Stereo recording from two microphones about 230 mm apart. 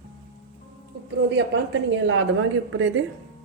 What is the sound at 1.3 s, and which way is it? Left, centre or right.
A woman's voice, right.